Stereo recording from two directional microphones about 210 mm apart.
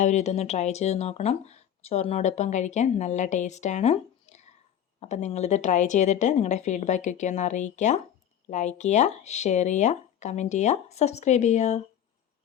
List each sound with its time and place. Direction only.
0.0 s speech: 35° left (ahead or behind)